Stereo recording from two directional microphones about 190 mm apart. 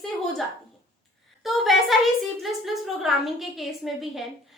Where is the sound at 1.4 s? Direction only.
Centre (ahead or behind).